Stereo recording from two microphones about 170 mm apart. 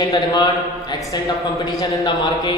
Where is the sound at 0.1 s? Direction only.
25° left (ahead or behind).